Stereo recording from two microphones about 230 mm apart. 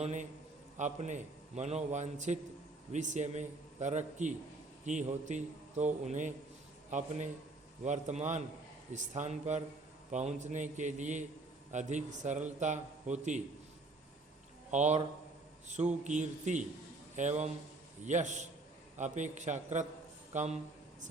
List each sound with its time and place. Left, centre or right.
0.0 s a man's voice: right
14.7 s a man's voice: right